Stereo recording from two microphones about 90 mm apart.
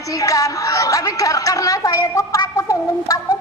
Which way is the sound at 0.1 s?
40° left (ahead or behind).